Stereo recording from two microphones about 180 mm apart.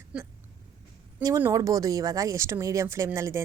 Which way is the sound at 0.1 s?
5° right (ahead or behind).